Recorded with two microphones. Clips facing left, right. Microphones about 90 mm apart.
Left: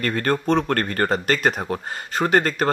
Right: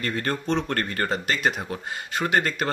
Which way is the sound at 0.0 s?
55° left (ahead or behind).